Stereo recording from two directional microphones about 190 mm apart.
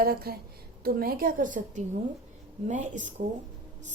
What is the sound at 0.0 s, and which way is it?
A woman's voice, 50° right (ahead or behind).